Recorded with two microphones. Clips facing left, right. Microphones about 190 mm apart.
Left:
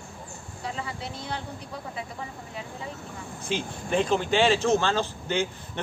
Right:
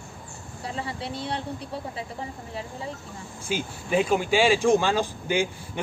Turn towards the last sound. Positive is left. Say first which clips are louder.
# right 2 dB
turn(degrees=-10)  # may be behind; listen again after turning